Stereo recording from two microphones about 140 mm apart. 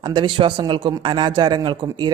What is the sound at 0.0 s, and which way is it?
Speech, 35° right (ahead or behind).